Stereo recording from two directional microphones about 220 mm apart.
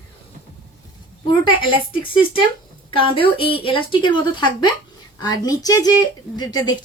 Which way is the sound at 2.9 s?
25° left (ahead or behind).